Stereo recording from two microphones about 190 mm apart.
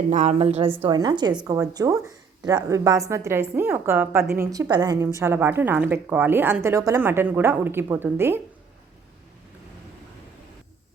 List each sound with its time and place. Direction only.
0.1 s a woman's voice: 40° right (ahead or behind); by 8.4 s 10° right (ahead or behind)